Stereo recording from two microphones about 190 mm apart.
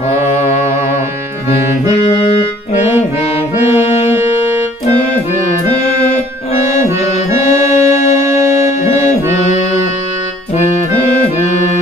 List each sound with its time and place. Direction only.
7.2 s music: 35° left (ahead or behind)